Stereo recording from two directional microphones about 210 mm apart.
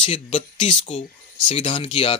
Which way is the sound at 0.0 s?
25° left (ahead or behind).